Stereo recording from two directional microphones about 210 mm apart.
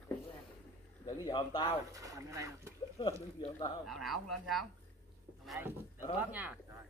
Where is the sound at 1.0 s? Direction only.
20° left (ahead or behind).